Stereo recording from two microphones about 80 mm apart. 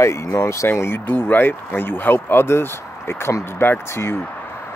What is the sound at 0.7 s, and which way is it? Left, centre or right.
Speech, left.